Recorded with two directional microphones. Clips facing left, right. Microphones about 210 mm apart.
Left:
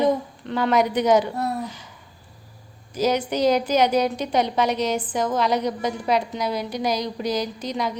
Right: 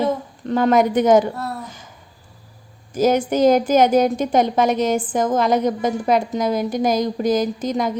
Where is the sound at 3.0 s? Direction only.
50° right (ahead or behind).